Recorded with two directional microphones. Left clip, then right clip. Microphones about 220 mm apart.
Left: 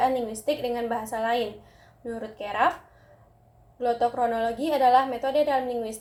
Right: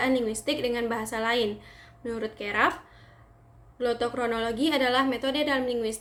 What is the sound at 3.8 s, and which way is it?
Speech, 60° right (ahead or behind).